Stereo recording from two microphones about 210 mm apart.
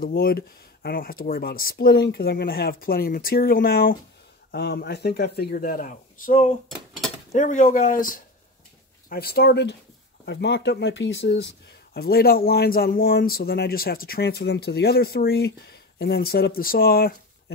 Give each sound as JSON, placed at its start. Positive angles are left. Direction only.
{"t": 0.0, "sound": "speech", "side_deg": 45}